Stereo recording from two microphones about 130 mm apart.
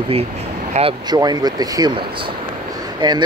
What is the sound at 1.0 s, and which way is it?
Speech, 30° right (ahead or behind).